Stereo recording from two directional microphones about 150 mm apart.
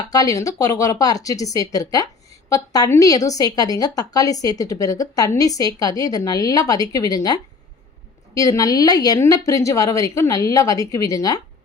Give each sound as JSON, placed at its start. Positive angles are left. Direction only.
{"t": 0.1, "sound": "a woman's voice", "side_deg": 25}
{"t": 8.4, "sound": "a woman's voice", "side_deg": 25}